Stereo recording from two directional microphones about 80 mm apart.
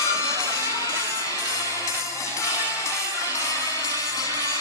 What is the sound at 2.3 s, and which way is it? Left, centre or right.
Music, left.